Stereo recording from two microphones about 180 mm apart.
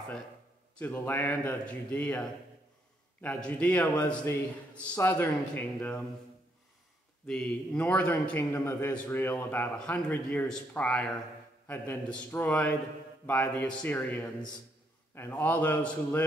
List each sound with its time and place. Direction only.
0.7 s a man's voice: 10° left (ahead or behind)
7.2 s a man's voice: 5° left (ahead or behind)